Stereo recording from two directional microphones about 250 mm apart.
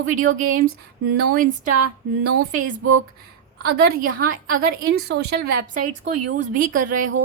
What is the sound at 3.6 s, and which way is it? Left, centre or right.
A woman's voice, right.